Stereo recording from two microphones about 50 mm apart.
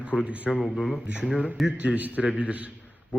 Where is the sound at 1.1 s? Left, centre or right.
Centre.